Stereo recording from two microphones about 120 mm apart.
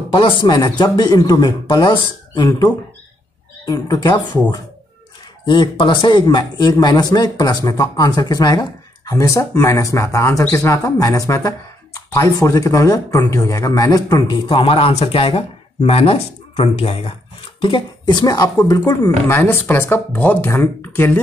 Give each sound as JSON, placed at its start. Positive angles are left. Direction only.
{"t": 0.1, "sound": "a man's voice", "side_deg": 40}
{"t": 14.5, "sound": "speech", "side_deg": 50}
{"t": 17.6, "sound": "a man's voice", "side_deg": 45}
{"t": 19.0, "sound": "speech", "side_deg": 20}